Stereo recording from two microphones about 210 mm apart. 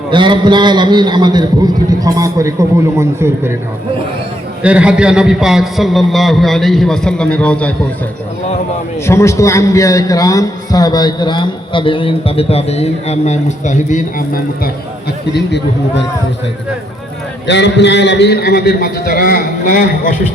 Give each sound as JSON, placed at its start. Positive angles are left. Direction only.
{"t": 0.1, "sound": "a man's voice", "side_deg": -20}
{"t": 4.6, "sound": "a man's voice", "side_deg": -5}
{"t": 9.0, "sound": "a man's voice", "side_deg": 15}
{"t": 15.3, "sound": "a man's voice", "side_deg": 55}
{"t": 17.4, "sound": "a man's voice", "side_deg": 55}